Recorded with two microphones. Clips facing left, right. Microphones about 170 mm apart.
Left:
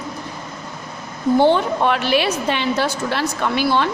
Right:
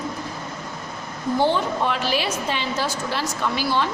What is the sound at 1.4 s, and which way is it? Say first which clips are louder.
A woman's voice: left 4 dB; 60° left (ahead or behind).